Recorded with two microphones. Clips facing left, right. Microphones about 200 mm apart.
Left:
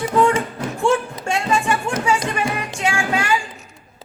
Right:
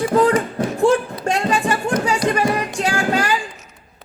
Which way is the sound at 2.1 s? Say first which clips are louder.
Right 2 dB; 35° right (ahead or behind).